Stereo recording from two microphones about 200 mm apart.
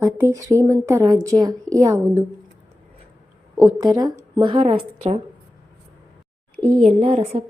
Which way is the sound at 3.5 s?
15° right (ahead or behind).